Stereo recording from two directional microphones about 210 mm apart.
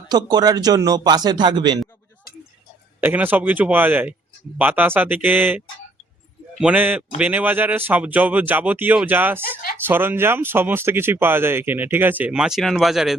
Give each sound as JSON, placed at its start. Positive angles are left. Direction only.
{"t": 0.1, "sound": "speech", "side_deg": -20}
{"t": 3.0, "sound": "speech", "side_deg": -10}